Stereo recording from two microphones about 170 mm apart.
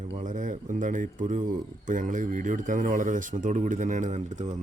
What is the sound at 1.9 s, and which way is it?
Speech, 50° right (ahead or behind).